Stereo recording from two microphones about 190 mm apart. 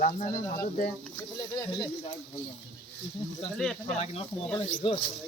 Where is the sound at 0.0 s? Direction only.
45° left (ahead or behind).